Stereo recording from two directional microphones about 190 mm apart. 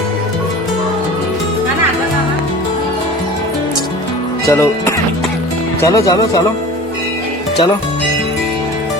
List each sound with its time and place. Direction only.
4.4 s speech: 15° left (ahead or behind)